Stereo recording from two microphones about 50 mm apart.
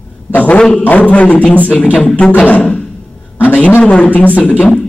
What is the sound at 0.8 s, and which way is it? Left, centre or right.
Speech, left.